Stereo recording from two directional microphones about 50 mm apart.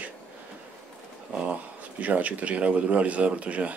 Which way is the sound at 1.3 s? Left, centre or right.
Right.